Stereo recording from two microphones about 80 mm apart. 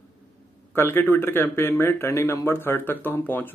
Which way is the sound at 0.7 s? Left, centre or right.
Left.